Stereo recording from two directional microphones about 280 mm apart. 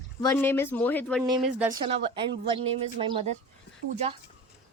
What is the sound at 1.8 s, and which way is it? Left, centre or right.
Speech, centre.